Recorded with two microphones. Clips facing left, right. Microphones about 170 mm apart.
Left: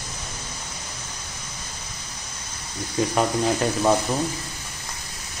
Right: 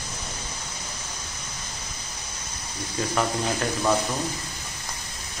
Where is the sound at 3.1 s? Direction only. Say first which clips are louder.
Left 3 dB; 20° left (ahead or behind).